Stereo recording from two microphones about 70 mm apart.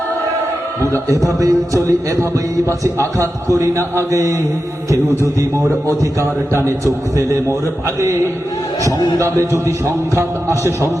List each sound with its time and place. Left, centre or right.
1.4 s a man's voice: right
2.6 s a man's voice: right
5.4 s a man's voice: right
9.4 s a man's voice: right